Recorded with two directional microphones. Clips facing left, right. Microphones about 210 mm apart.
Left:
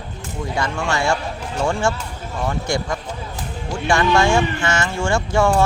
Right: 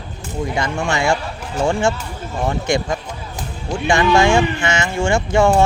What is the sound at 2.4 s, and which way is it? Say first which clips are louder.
Speech: right 3 dB; 20° right (ahead or behind).